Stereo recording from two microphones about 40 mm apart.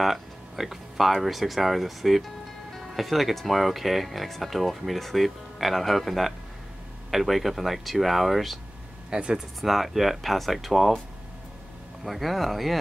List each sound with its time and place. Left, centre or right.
0.0 s speech: centre
9.1 s speech: centre
9.6 s speech: centre
12.0 s speech: centre